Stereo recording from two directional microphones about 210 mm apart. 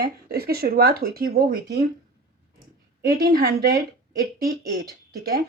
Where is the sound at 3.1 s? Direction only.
45° right (ahead or behind).